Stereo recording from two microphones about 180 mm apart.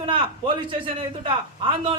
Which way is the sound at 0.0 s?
30° right (ahead or behind).